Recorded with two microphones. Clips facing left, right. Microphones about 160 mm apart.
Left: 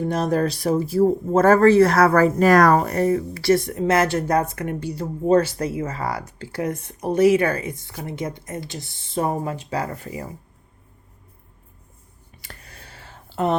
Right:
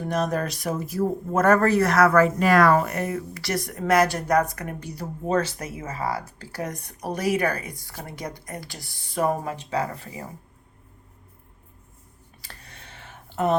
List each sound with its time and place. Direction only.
0.1 s speech: 30° left (ahead or behind)
6.0 s speech: 25° right (ahead or behind)
6.7 s a woman's voice: 25° left (ahead or behind)
12.4 s a sound: 30° right (ahead or behind)